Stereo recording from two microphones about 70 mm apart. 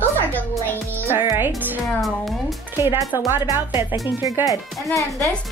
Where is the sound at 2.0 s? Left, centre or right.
Centre.